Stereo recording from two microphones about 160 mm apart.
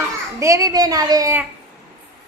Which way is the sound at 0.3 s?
20° right (ahead or behind).